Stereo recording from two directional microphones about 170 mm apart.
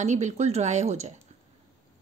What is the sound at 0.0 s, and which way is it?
Speech, 45° right (ahead or behind).